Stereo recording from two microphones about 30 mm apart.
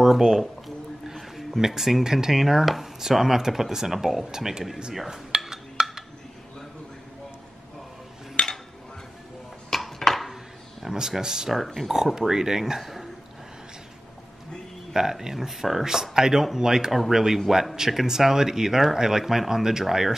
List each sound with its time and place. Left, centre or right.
0.2 s speech: centre
1.6 s speech: centre
2.0 s speech: centre
2.4 s speech: centre
4.3 s speech: centre
4.9 s dishes: centre
5.5 s a sound: centre
8.4 s dishes: left
9.7 s a sound: centre
10.9 s speech: centre
11.5 s speech: centre
12.2 s speech: centre
15.0 s speech: centre